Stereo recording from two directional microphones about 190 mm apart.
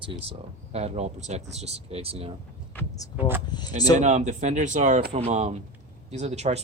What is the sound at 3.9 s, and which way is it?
Speech, 40° right (ahead or behind).